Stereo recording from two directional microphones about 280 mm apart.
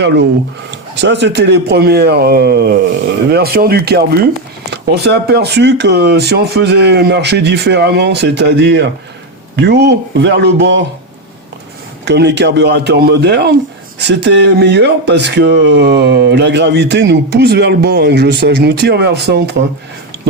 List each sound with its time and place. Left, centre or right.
0.0 s speech: right
12.0 s speech: right